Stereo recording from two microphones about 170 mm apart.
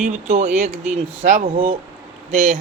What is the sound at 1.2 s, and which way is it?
Speech, 55° right (ahead or behind).